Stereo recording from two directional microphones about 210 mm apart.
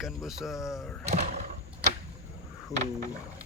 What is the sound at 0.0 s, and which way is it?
Speech, centre (ahead or behind).